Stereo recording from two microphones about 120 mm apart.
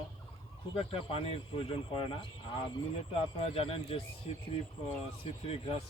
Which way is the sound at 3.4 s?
50° left (ahead or behind).